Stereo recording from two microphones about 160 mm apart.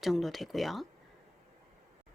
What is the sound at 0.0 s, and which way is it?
Speech, centre (ahead or behind).